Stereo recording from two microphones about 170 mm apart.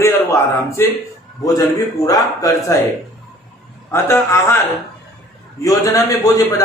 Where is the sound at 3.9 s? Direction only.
15° left (ahead or behind).